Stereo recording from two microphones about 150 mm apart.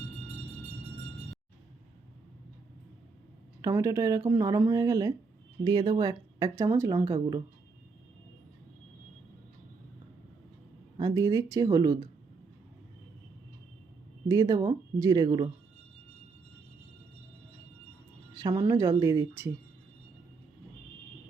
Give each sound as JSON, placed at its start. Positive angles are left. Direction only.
{"t": 3.6, "sound": "speech", "side_deg": -20}
{"t": 10.9, "sound": "speech", "side_deg": -25}
{"t": 14.3, "sound": "speech", "side_deg": -25}
{"t": 18.3, "sound": "a woman's voice", "side_deg": -25}